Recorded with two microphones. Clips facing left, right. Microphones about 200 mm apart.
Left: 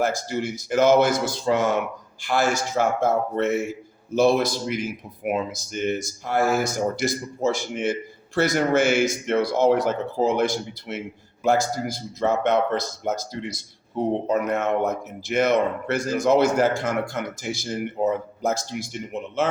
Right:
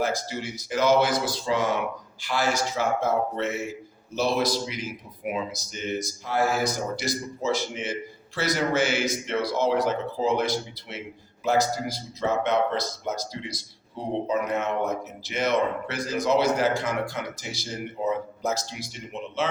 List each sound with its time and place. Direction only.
0.0 s speech: 50° left (ahead or behind)